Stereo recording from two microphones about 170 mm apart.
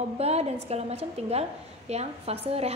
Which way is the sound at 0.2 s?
40° right (ahead or behind).